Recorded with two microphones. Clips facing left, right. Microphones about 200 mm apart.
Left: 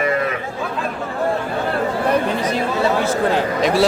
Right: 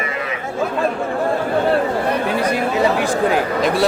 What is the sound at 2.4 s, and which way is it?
Speech, 10° right (ahead or behind).